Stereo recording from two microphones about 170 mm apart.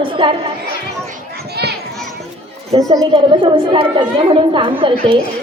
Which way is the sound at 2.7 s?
35° right (ahead or behind).